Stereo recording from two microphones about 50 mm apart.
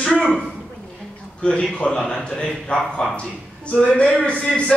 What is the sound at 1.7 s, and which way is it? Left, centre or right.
Speech, centre.